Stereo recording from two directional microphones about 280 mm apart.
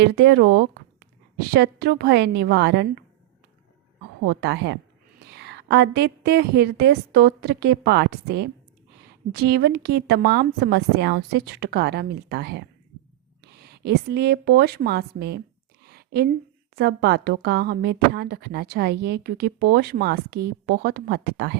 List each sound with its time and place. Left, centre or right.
0.0 s a woman's voice: right
4.3 s a woman's voice: right
15.9 s a sound: right
16.7 s a woman's voice: right